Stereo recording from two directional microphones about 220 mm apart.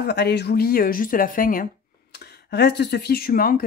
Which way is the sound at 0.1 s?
50° left (ahead or behind).